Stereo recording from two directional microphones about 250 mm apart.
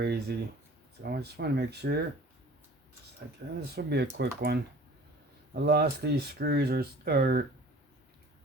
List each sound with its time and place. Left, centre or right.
0.0 s speech: right
3.7 s speech: right